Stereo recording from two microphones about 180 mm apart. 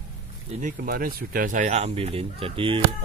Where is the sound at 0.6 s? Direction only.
50° right (ahead or behind).